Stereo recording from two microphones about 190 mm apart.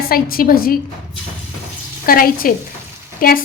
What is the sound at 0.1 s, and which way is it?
Frying, 50° left (ahead or behind).